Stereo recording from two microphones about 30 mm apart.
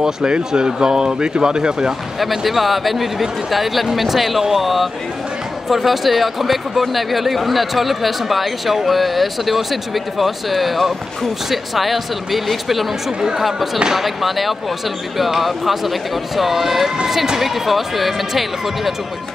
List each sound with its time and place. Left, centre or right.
0.0 s speech: right
2.1 s speech: centre